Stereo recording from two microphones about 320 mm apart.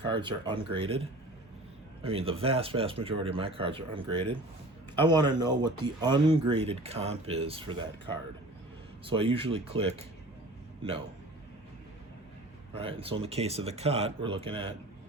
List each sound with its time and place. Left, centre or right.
0.1 s speech: centre
2.0 s speech: centre
9.0 s speech: centre
12.7 s speech: centre